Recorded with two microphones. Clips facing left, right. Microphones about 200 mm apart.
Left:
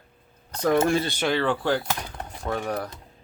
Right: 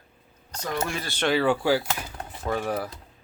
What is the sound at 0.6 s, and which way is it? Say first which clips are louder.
Speech: left 9 dB; 55° left (ahead or behind).